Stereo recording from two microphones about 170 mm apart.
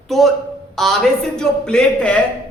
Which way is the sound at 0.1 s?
Centre (ahead or behind).